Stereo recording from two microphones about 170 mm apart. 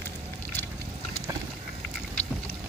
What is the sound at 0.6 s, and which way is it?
Boat, 10° left (ahead or behind).